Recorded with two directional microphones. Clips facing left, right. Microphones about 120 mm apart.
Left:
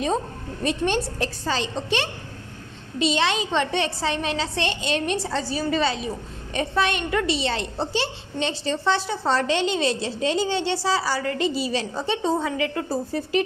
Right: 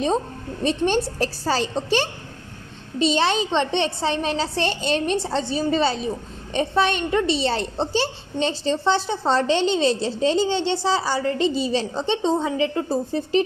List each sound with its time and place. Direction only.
0.6 s a woman's voice: 30° right (ahead or behind)
1.2 s a woman's voice: 40° right (ahead or behind)